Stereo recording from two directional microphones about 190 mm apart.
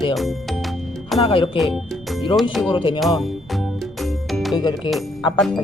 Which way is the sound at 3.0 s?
Centre (ahead or behind).